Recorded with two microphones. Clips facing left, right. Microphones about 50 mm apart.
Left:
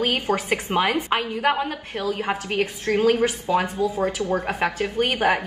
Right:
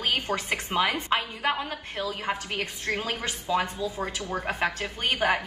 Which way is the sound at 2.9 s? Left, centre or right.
Left.